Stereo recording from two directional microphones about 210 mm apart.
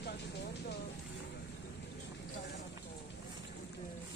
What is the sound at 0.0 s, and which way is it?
Vehicle, 50° left (ahead or behind).